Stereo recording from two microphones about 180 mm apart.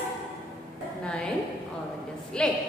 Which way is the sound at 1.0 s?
5° left (ahead or behind).